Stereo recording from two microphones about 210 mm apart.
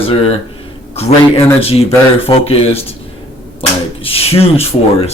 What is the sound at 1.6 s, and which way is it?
Speech, 30° left (ahead or behind).